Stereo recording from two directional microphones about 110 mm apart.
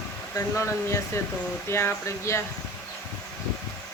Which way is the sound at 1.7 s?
25° left (ahead or behind).